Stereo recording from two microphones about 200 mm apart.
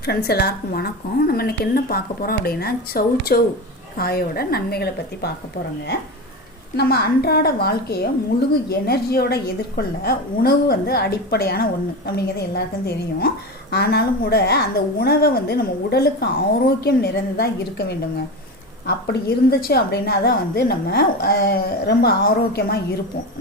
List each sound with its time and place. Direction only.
0.0 s a woman's voice: 50° left (ahead or behind)
6.7 s a woman's voice: 50° left (ahead or behind)